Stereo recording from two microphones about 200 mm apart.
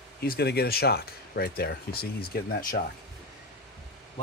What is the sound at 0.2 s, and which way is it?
Speech, 50° left (ahead or behind).